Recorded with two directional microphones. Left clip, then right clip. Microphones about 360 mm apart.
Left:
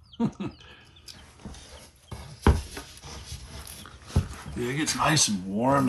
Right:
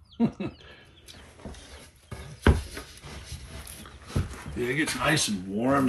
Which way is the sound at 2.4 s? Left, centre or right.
Left.